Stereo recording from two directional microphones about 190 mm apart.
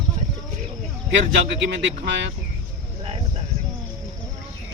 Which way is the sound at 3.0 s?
30° right (ahead or behind).